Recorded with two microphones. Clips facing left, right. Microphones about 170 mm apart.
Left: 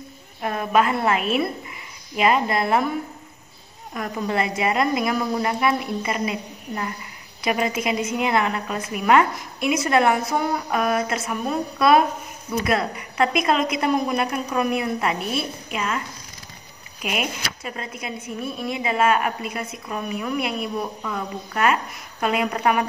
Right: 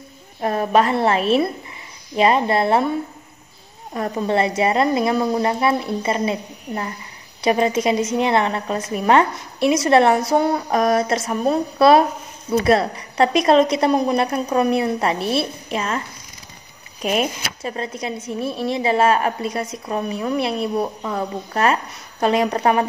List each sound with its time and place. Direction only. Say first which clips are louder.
0.4 s speech: right 3 dB; 35° right (ahead or behind)
3.9 s speech: right 5 dB; 35° right (ahead or behind)
17.0 s speech: right 6 dB; 35° right (ahead or behind)